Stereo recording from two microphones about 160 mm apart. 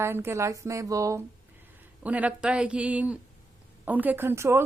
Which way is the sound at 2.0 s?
10° right (ahead or behind).